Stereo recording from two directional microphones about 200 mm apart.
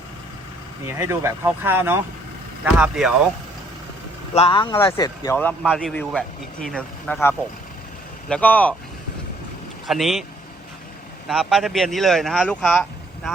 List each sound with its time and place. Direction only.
0.9 s speech: 15° right (ahead or behind)
4.4 s speech: 25° left (ahead or behind); by 8.7 s 5° left (ahead or behind)
9.8 s speech: centre (ahead or behind)
11.3 s speech: centre (ahead or behind)